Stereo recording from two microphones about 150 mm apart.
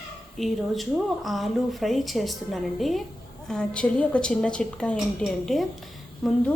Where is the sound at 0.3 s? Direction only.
Centre (ahead or behind).